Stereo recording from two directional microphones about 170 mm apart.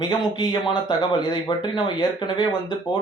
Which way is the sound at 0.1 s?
25° left (ahead or behind).